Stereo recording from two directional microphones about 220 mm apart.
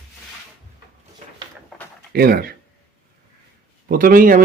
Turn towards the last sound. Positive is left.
turn(degrees=-40)  # may be behind; listen again after turning